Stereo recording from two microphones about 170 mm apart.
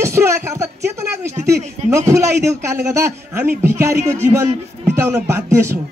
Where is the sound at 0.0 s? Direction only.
15° right (ahead or behind).